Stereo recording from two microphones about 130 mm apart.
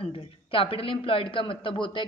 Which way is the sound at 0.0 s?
45° left (ahead or behind).